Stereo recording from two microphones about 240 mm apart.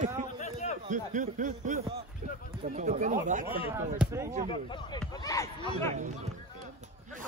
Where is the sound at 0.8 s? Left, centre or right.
Right.